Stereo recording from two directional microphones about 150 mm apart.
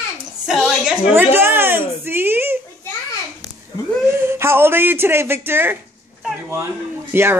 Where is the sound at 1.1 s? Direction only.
15° right (ahead or behind).